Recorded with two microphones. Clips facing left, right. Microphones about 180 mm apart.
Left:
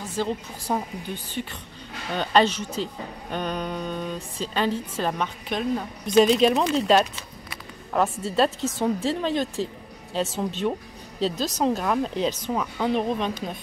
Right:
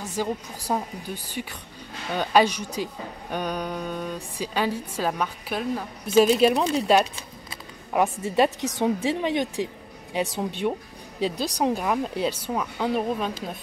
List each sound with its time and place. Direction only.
0.2 s speech: 10° right (ahead or behind)